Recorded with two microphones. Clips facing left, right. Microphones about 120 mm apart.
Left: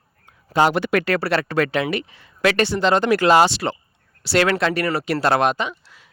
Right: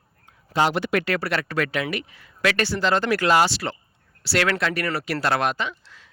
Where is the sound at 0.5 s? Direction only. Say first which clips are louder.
Left 4 dB; 50° left (ahead or behind).